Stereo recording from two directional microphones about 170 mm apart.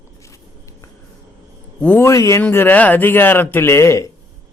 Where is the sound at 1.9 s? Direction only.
20° left (ahead or behind).